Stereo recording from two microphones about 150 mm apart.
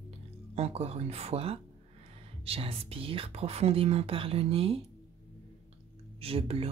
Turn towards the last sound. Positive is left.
turn(degrees=-40)  # may be behind; listen again after turning